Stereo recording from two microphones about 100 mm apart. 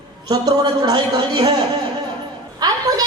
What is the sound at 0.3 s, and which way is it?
Speech, 40° right (ahead or behind).